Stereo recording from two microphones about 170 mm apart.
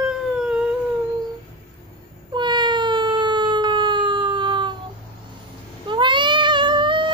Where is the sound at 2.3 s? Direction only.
25° right (ahead or behind).